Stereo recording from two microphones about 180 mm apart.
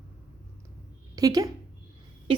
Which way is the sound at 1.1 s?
20° right (ahead or behind).